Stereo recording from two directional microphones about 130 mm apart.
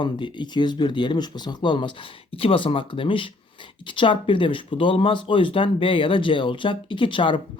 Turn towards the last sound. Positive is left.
turn(degrees=40)  # may be behind; listen again after turning